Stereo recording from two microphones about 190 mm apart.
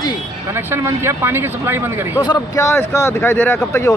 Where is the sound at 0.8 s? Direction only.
10° right (ahead or behind).